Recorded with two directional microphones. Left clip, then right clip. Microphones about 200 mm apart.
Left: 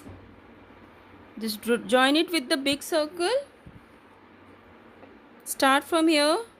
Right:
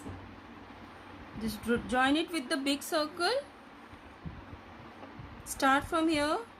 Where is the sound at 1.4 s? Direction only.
50° left (ahead or behind).